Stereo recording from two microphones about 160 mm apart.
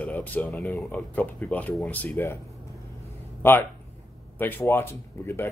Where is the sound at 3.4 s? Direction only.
15° left (ahead or behind).